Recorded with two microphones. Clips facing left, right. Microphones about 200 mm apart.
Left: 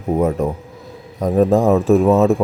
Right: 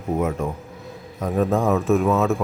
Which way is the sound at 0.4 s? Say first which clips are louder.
Left 6 dB; 35° left (ahead or behind).